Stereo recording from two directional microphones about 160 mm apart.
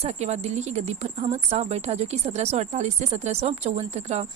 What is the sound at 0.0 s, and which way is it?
A woman's voice, 45° right (ahead or behind).